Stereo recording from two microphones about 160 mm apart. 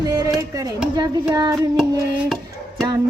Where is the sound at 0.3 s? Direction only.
20° right (ahead or behind).